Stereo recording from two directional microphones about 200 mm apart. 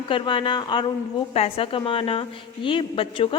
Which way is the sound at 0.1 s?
25° left (ahead or behind).